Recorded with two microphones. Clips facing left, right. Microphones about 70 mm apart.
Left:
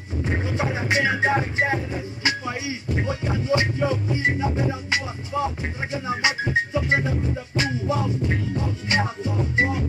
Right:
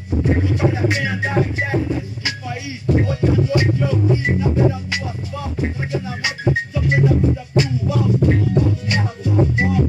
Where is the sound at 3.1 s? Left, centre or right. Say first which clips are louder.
Right 5 dB; left.